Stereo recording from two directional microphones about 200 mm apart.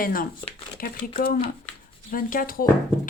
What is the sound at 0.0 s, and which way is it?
Speech, 45° left (ahead or behind).